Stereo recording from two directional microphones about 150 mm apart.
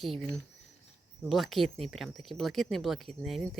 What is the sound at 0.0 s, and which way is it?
Speech, centre (ahead or behind).